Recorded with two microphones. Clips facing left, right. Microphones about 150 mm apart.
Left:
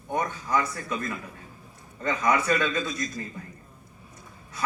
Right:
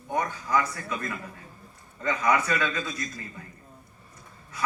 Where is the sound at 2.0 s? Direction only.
35° left (ahead or behind).